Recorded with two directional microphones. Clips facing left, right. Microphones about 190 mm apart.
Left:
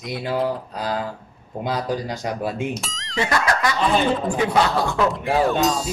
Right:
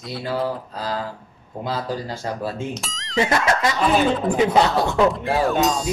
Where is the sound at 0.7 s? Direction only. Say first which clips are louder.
Left 1 dB; 15° left (ahead or behind).